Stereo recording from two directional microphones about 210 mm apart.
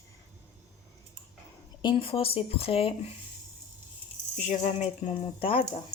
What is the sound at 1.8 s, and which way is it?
Speech, 25° left (ahead or behind).